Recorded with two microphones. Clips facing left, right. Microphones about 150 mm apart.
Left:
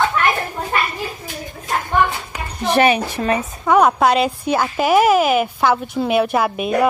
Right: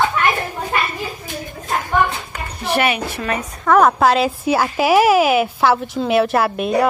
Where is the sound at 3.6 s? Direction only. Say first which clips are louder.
Right 1 dB; centre (ahead or behind).